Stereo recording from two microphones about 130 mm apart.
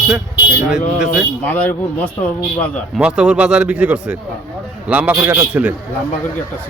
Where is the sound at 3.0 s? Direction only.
10° right (ahead or behind).